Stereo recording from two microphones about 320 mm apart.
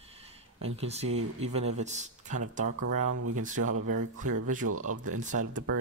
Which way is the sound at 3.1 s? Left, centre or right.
Right.